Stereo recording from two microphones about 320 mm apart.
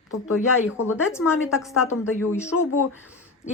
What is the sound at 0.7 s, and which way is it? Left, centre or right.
A woman's voice, centre.